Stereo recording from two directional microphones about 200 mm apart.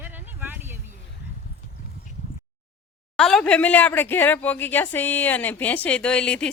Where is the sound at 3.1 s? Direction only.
Centre (ahead or behind).